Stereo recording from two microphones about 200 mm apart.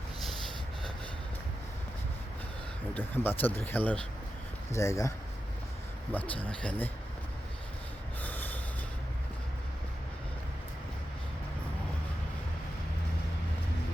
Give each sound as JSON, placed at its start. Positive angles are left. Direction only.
{"t": 2.9, "sound": "speech", "side_deg": 10}
{"t": 8.2, "sound": "train wheels squealing", "side_deg": 10}